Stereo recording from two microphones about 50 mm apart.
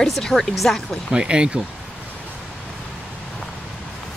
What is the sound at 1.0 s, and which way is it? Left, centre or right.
Speech, centre.